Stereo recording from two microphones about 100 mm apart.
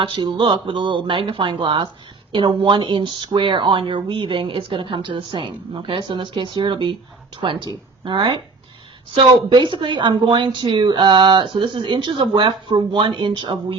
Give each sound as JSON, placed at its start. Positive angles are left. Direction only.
{"t": 0.0, "sound": "a woman's voice", "side_deg": -55}